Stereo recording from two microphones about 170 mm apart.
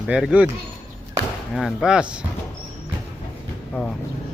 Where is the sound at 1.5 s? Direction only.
5° right (ahead or behind).